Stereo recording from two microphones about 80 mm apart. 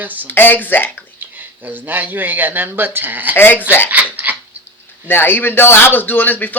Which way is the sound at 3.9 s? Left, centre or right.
Right.